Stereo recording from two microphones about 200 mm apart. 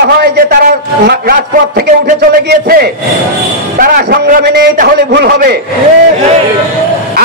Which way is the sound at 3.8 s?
45° right (ahead or behind).